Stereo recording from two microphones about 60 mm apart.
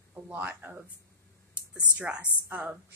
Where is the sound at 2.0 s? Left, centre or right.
Centre.